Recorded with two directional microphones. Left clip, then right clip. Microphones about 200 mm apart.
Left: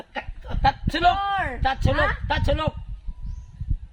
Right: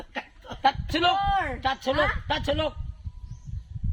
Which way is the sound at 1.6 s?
10° left (ahead or behind).